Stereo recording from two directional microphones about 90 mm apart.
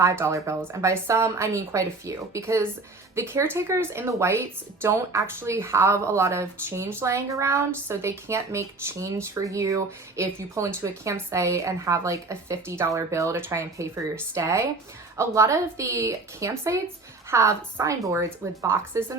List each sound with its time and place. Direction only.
0.0 s a woman's voice: 35° right (ahead or behind)